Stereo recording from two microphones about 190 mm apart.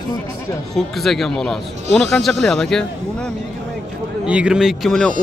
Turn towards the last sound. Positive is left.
turn(degrees=0)  # may be behind; listen again after turning